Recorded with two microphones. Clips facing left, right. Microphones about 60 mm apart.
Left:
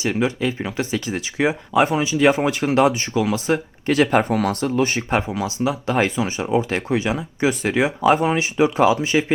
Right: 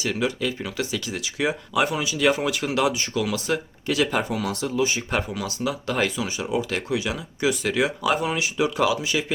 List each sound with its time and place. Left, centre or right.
0.0 s speech: left
3.8 s speech: left
5.1 s speech: left